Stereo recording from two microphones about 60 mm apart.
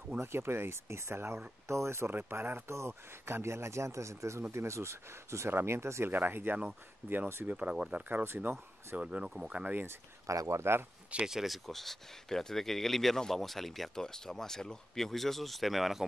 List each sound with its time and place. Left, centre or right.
0.2 s a man's voice: right
2.0 s speech: right
2.7 s a man's voice: right
5.5 s a man's voice: right
6.1 s speech: right
7.0 s speech: centre
7.4 s speech: right
8.1 s speech: right
8.9 s speech: centre
9.7 s speech: right
10.2 s speech: right
11.1 s speech: centre